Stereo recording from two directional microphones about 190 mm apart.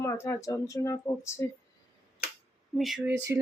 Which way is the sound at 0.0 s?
15° left (ahead or behind).